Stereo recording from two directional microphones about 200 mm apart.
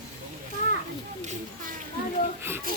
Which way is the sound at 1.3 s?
45° right (ahead or behind).